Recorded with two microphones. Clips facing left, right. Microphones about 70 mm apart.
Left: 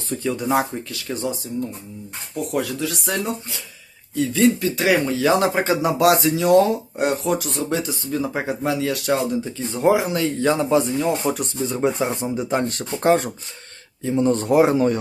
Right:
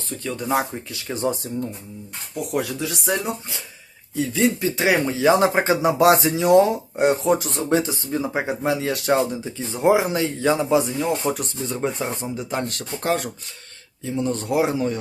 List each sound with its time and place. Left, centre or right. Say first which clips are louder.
0.2 s speech: left 2 dB; centre
1.5 s speech: left 1 dB; right
2.3 s speech: left 1 dB; centre
4.6 s speech: left 1 dB; right
8.2 s speech: even; centre
9.4 s speech: left 1 dB; centre
10.0 s speech: right 1 dB; right
10.4 s speech: even; centre
11.9 s speech: left 4 dB; left
14.2 s a man's voice: left 5 dB; left